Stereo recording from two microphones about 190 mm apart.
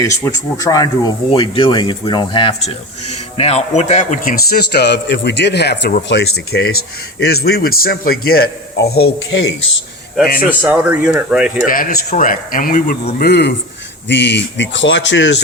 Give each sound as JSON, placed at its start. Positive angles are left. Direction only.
{"t": 0.0, "sound": "a man's voice", "side_deg": 15}
{"t": 10.2, "sound": "speech", "side_deg": 50}
{"t": 10.6, "sound": "speech", "side_deg": -10}
{"t": 11.7, "sound": "speech", "side_deg": 45}
{"t": 13.2, "sound": "a man's voice", "side_deg": 60}